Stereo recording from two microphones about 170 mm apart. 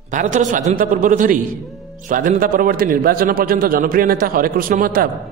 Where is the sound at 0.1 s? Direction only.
45° right (ahead or behind).